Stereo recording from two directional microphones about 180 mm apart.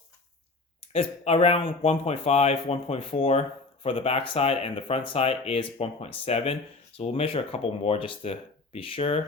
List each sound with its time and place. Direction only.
0.9 s speech: 35° left (ahead or behind)